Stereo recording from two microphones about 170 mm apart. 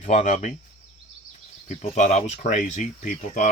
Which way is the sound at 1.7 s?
45° left (ahead or behind).